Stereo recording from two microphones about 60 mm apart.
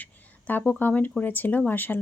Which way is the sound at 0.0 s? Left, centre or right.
Left.